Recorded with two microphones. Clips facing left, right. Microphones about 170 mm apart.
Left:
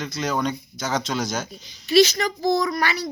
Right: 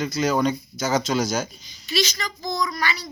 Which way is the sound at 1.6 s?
60° left (ahead or behind).